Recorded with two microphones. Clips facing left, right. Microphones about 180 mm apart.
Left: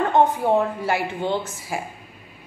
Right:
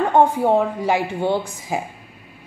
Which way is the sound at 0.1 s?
10° right (ahead or behind).